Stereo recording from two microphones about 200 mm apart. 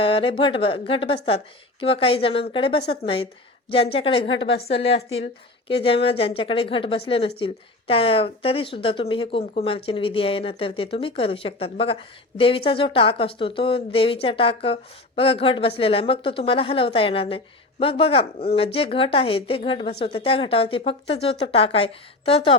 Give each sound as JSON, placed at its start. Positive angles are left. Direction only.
{"t": 0.0, "sound": "a woman's voice", "side_deg": 25}
{"t": 4.3, "sound": "a woman's voice", "side_deg": 60}
{"t": 4.8, "sound": "a woman's voice", "side_deg": 30}